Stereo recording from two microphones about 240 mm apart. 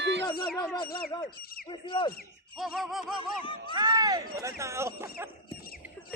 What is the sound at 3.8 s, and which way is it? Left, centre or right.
Speech, centre.